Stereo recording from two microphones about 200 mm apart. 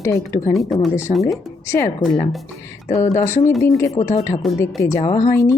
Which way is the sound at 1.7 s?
15° left (ahead or behind).